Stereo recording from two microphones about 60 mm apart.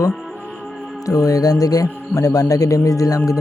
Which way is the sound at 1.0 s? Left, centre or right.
Left.